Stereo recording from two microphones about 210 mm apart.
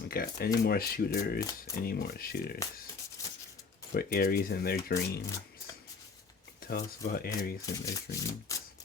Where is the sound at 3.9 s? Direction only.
45° left (ahead or behind).